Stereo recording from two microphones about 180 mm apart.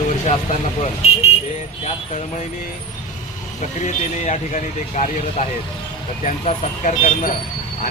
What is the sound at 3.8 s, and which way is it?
Speech, 40° left (ahead or behind).